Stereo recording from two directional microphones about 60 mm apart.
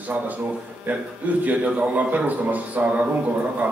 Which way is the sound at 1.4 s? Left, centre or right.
Right.